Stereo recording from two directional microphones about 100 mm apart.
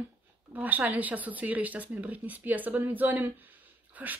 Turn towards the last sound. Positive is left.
turn(degrees=-15)  # may be behind; listen again after turning